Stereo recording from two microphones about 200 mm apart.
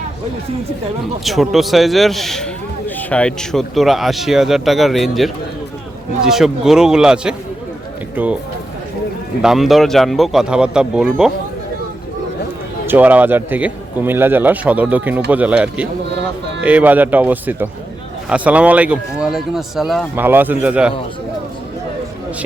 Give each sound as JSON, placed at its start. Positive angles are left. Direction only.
{"t": 1.2, "sound": "a man's voice", "side_deg": 0}
{"t": 9.4, "sound": "a man's voice", "side_deg": 0}
{"t": 12.9, "sound": "a man's voice", "side_deg": -10}